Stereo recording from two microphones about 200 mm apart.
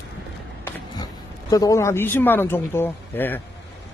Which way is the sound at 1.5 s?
15° left (ahead or behind).